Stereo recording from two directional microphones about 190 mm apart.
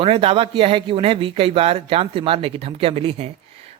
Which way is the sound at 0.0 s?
30° right (ahead or behind).